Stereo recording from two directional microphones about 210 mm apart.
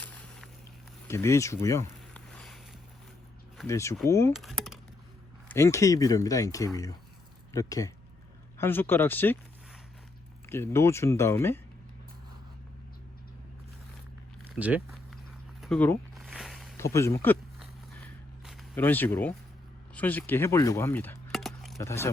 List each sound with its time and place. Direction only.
0.0 s vehicle: 5° left (ahead or behind)
1.0 s speech: 15° left (ahead or behind)
2.3 s a sound: centre (ahead or behind)
3.7 s speech: 15° left (ahead or behind)
4.3 s speech: centre (ahead or behind)
5.5 s speech: 15° left (ahead or behind)
10.5 s speech: 10° left (ahead or behind)
14.5 s speech: 5° right (ahead or behind)
15.6 s a sound: 5° left (ahead or behind)
16.7 s speech: 15° left (ahead or behind)
18.4 s speech: 5° left (ahead or behind)
21.8 s speech: 15° left (ahead or behind)